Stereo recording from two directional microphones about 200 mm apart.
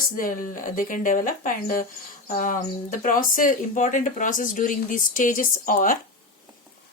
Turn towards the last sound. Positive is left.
turn(degrees=45)  # may be behind; listen again after turning